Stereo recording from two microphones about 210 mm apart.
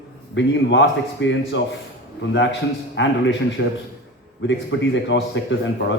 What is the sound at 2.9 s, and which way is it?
A man's voice, 60° left (ahead or behind).